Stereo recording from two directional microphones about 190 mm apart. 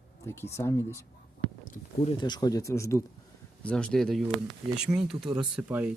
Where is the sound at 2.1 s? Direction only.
20° left (ahead or behind).